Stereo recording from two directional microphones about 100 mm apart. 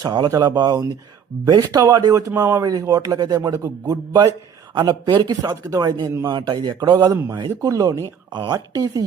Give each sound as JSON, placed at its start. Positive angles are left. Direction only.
{"t": 0.0, "sound": "speech", "side_deg": -40}
{"t": 4.7, "sound": "speech", "side_deg": -45}
{"t": 8.3, "sound": "speech", "side_deg": -50}
{"t": 8.5, "sound": "speech", "side_deg": -40}